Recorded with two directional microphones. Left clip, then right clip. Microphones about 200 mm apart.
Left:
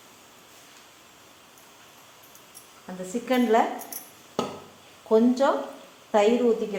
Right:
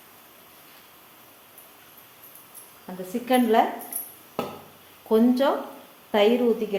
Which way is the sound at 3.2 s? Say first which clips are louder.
Right 1 dB; 20° right (ahead or behind).